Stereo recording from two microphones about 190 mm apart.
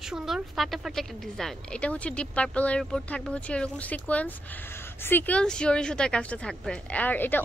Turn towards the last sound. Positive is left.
turn(degrees=10)  # may be behind; listen again after turning